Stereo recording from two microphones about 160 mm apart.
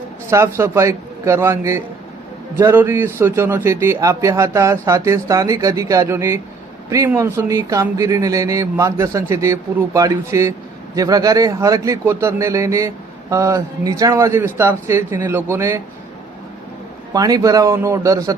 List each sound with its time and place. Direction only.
0.3 s a man's voice: 15° right (ahead or behind)
17.2 s a man's voice: 25° right (ahead or behind)